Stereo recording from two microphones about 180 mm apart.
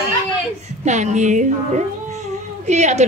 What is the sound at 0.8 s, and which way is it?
A woman's voice, 40° right (ahead or behind).